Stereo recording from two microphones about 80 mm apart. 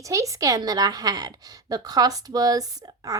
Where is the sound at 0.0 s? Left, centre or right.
Right.